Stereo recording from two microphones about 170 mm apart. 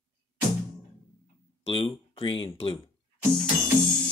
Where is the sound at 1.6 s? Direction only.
30° left (ahead or behind).